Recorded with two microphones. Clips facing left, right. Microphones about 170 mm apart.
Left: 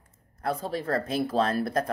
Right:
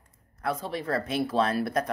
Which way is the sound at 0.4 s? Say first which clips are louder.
Left 1 dB; 35° left (ahead or behind).